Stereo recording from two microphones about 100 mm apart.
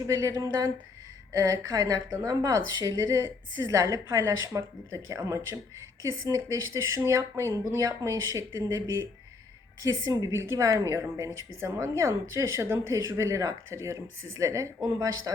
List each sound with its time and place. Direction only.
0.0 s a woman's voice: 30° right (ahead or behind)
9.8 s a woman's voice: 35° right (ahead or behind)